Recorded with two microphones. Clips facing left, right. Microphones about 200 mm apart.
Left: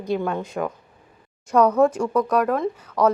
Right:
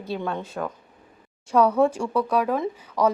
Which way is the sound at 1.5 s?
10° right (ahead or behind).